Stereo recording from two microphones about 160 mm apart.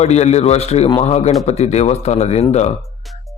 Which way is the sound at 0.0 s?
45° left (ahead or behind).